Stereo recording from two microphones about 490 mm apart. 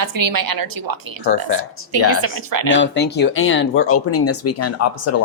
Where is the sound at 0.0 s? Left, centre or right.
Right.